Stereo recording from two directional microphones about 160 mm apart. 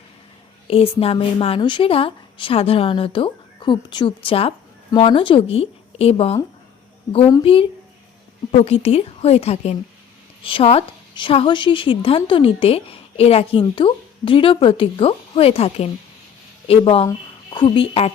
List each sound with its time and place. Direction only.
0.7 s a woman's voice: 35° left (ahead or behind)
7.4 s a woman's voice: 35° left (ahead or behind)